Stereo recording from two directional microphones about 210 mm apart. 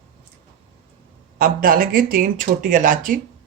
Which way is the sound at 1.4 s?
40° right (ahead or behind).